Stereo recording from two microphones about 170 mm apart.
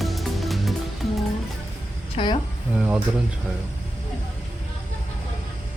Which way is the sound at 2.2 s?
35° left (ahead or behind).